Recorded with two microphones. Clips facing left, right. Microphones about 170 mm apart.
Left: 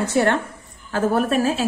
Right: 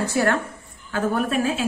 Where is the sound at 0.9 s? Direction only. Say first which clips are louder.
Left 3 dB; 40° left (ahead or behind).